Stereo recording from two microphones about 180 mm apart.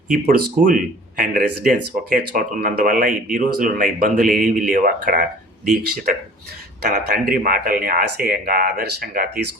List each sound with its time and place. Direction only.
0.1 s speech: 50° right (ahead or behind)
6.8 s speech: 55° right (ahead or behind)